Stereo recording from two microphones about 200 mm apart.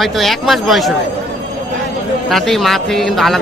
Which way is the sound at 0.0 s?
Centre (ahead or behind).